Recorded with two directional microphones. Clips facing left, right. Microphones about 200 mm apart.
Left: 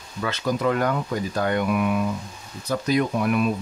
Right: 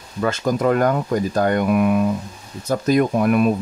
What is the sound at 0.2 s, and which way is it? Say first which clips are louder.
Speech: right 5 dB; 45° right (ahead or behind).